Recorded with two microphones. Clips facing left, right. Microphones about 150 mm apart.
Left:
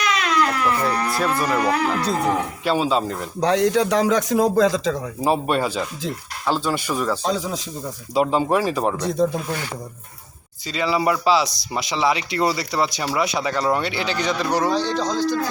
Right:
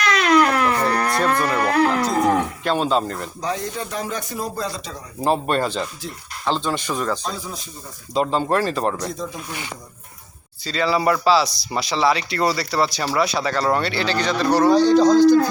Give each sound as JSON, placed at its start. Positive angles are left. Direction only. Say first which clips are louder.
{"t": 0.1, "sound": "cat", "louder": "right 6 dB", "side_deg": -65}
{"t": 1.1, "sound": "speech", "louder": "right 1 dB", "side_deg": 5}
{"t": 3.4, "sound": "speech", "louder": "left 10 dB", "side_deg": 80}
{"t": 5.2, "sound": "speech", "louder": "even", "side_deg": 5}
{"t": 7.3, "sound": "speech", "louder": "left 6 dB", "side_deg": 90}
{"t": 8.1, "sound": "speech", "louder": "left 1 dB", "side_deg": 10}
{"t": 9.1, "sound": "speech", "louder": "left 9 dB", "side_deg": 60}
{"t": 10.7, "sound": "speech", "louder": "right 1 dB", "side_deg": 15}
{"t": 14.7, "sound": "speech", "louder": "right 9 dB", "side_deg": -10}